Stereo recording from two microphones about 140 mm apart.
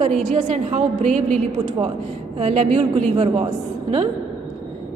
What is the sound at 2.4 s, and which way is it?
A woman's voice, 50° right (ahead or behind).